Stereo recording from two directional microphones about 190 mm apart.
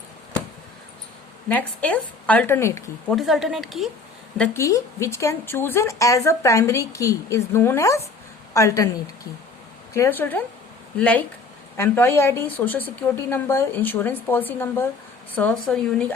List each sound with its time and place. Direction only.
1.5 s speech: 10° left (ahead or behind)
3.1 s a woman's voice: centre (ahead or behind)
4.4 s speech: 15° left (ahead or behind)
9.9 s speech: 15° left (ahead or behind)